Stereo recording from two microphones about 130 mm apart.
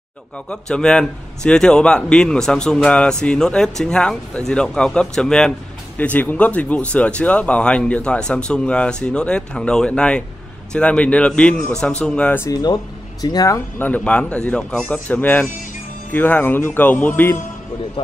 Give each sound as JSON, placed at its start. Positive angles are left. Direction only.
{"t": 0.5, "sound": "a man's voice", "side_deg": 5}
{"t": 13.2, "sound": "speech", "side_deg": 30}
{"t": 13.7, "sound": "speech", "side_deg": 15}